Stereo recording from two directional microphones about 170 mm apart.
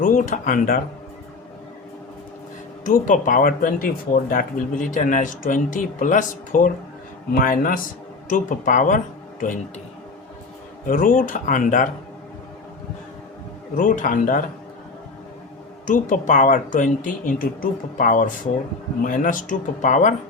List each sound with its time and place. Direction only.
0.0 s speech: 55° left (ahead or behind)
2.8 s speech: 50° left (ahead or behind)
10.8 s speech: 55° left (ahead or behind)
13.7 s speech: 50° left (ahead or behind)
15.9 s speech: 50° left (ahead or behind)